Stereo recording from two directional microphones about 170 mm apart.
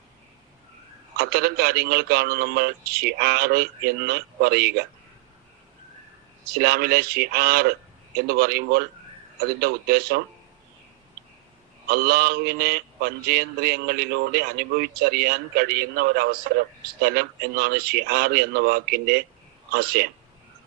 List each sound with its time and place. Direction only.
1.1 s a man's voice: 65° right (ahead or behind)
6.5 s a man's voice: 65° right (ahead or behind)
11.9 s a man's voice: 65° right (ahead or behind)